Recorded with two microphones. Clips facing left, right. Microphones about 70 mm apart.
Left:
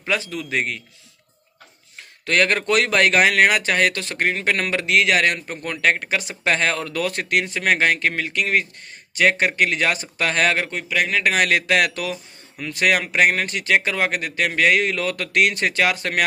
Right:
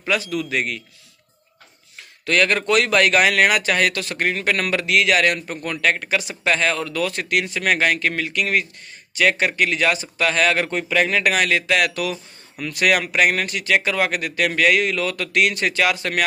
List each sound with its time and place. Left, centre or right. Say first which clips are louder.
0.1 s a man's voice: right 2 dB; left
2.2 s speech: even; left
10.7 s a man's voice: right 3 dB; centre
11.5 s speech: left 1 dB; left
12.1 s speech: right 1 dB; left